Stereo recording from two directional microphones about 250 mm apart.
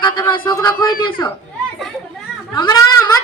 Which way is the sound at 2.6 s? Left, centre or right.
Centre.